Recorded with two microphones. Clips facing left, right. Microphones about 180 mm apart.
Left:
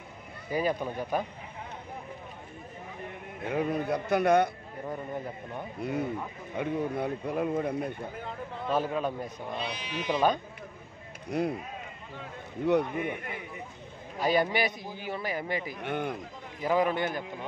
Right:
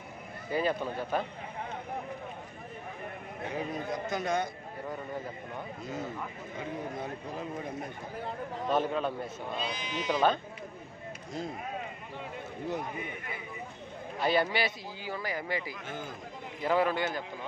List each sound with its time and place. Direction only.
0.5 s a man's voice: 15° left (ahead or behind)
3.4 s speech: 60° left (ahead or behind)
5.8 s speech: 65° left (ahead or behind)
8.6 s a man's voice: 5° left (ahead or behind)
9.6 s speech: 65° left (ahead or behind)
11.2 s speech: 65° left (ahead or behind)
12.6 s speech: 65° left (ahead or behind)
14.2 s a man's voice: 15° left (ahead or behind)
15.8 s speech: 65° left (ahead or behind)
16.6 s a man's voice: 15° left (ahead or behind)